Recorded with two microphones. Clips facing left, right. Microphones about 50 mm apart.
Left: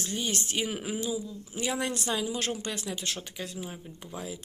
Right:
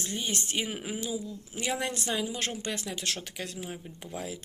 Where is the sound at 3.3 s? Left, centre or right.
Right.